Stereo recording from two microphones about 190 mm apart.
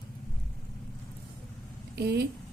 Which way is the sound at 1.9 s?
60° right (ahead or behind).